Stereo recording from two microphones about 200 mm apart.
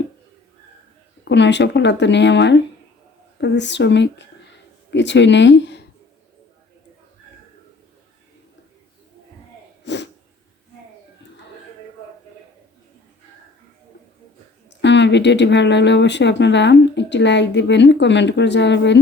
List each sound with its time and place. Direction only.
1.2 s speech: 60° left (ahead or behind)
9.8 s sneeze: 60° left (ahead or behind)
14.8 s speech: 60° left (ahead or behind)